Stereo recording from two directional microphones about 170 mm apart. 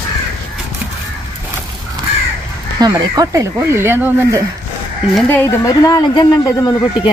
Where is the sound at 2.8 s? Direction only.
25° right (ahead or behind).